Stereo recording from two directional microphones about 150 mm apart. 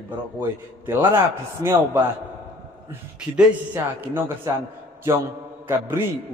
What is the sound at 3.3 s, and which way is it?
A man's voice, 15° right (ahead or behind).